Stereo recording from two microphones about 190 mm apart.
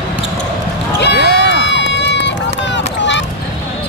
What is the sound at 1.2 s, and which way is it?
Run, 65° left (ahead or behind).